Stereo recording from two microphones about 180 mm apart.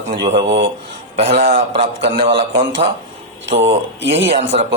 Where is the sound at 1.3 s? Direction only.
45° right (ahead or behind).